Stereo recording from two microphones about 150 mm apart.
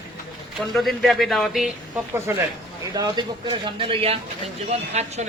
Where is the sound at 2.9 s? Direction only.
25° right (ahead or behind).